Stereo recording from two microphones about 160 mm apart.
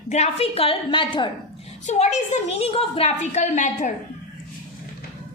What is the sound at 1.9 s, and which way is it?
A woman's voice, 45° left (ahead or behind).